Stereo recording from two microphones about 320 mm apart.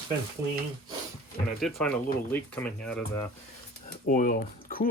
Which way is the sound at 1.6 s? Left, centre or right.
Centre.